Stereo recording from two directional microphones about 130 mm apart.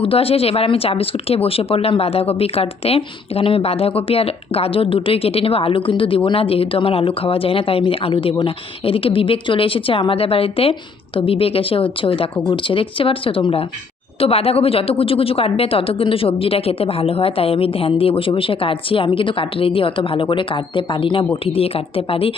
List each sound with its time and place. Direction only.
0.0 s speech: 45° left (ahead or behind)